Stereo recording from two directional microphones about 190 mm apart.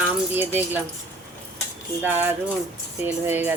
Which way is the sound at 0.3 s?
10° right (ahead or behind).